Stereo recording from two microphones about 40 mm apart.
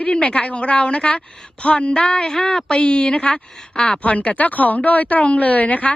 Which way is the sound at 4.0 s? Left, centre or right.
Left.